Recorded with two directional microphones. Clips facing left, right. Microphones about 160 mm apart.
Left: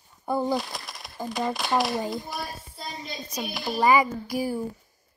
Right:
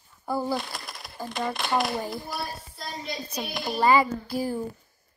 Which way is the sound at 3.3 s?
10° left (ahead or behind).